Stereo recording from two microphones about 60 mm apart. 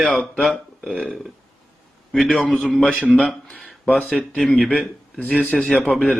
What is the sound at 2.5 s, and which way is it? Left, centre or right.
Speech, centre.